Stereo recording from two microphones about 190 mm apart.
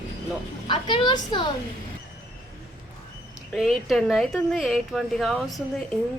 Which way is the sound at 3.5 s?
Centre (ahead or behind).